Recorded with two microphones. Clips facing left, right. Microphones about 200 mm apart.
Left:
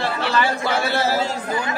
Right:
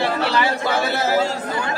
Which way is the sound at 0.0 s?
65° right (ahead or behind).